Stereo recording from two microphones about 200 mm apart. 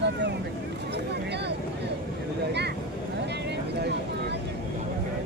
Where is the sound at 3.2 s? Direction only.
60° right (ahead or behind).